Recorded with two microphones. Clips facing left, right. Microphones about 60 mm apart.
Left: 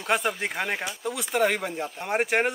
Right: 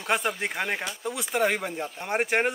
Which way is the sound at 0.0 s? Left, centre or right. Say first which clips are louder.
Left 1 dB; centre.